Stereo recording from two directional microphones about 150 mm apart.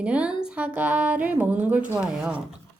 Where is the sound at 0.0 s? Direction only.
10° right (ahead or behind).